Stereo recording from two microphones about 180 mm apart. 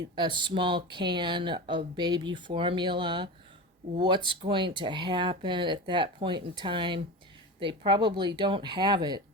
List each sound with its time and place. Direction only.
0.2 s speech: 25° right (ahead or behind)